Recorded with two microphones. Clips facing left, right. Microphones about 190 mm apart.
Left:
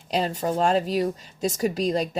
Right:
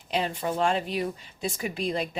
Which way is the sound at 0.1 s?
40° left (ahead or behind).